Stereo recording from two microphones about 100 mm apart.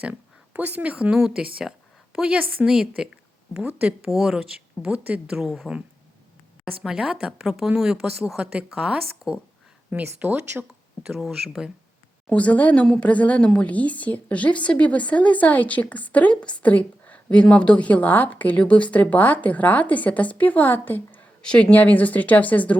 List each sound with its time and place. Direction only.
0.0 s speech: 15° right (ahead or behind)
6.8 s speech: 5° right (ahead or behind)
9.9 s speech: 15° right (ahead or behind)
11.0 s speech: centre (ahead or behind)
12.3 s a woman's voice: 15° left (ahead or behind)